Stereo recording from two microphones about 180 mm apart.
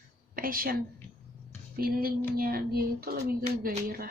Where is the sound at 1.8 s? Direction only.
55° right (ahead or behind).